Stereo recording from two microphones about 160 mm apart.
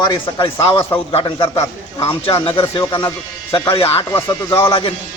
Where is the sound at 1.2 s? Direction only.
30° left (ahead or behind).